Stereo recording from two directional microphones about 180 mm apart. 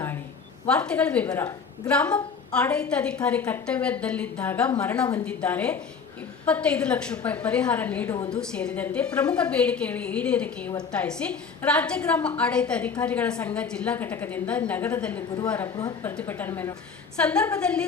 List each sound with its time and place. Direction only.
0.7 s a woman's voice: 5° left (ahead or behind)
15.7 s speech: 20° left (ahead or behind)
16.0 s a woman's voice: 10° left (ahead or behind)